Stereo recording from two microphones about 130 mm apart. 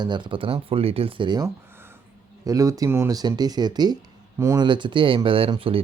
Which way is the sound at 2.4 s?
25° right (ahead or behind).